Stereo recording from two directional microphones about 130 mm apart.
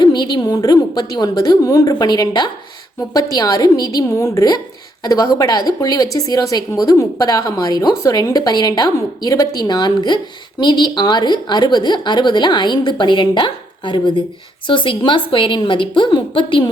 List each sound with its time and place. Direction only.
0.0 s a woman's voice: 35° left (ahead or behind)